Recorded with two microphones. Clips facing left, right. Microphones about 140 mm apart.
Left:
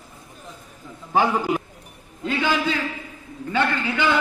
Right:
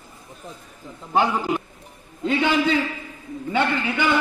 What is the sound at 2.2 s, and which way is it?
A man's voice, 20° right (ahead or behind).